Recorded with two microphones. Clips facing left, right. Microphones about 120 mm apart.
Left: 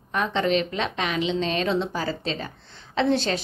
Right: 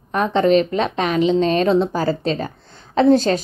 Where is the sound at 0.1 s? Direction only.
40° right (ahead or behind).